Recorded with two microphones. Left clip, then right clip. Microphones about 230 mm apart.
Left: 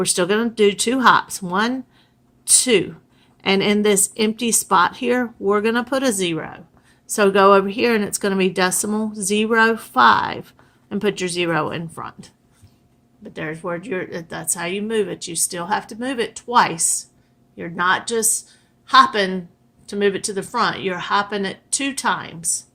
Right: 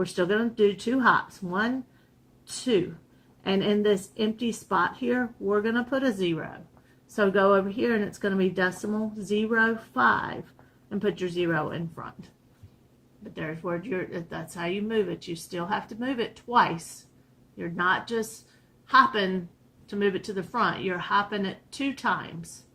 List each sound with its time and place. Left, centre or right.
0.0 s speech: left
3.4 s speech: left
13.3 s speech: left